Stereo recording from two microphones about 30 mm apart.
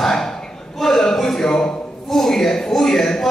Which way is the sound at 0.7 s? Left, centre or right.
Centre.